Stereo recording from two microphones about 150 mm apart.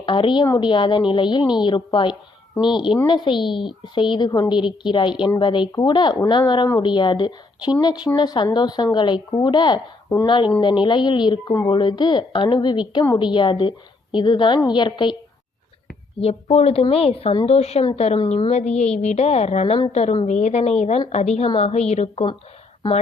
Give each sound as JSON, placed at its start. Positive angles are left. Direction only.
{"t": 0.0, "sound": "a woman's voice", "side_deg": 35}
{"t": 16.2, "sound": "a woman's voice", "side_deg": 40}